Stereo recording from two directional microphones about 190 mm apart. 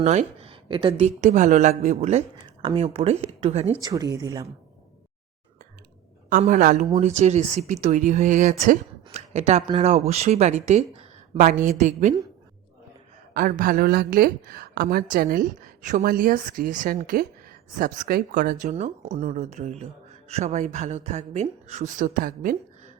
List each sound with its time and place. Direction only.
0.0 s speech: 35° right (ahead or behind)
1.2 s speech: 40° right (ahead or behind)
3.8 s speech: 20° right (ahead or behind)
6.3 s speech: 40° right (ahead or behind)
13.3 s a woman's voice: 50° right (ahead or behind)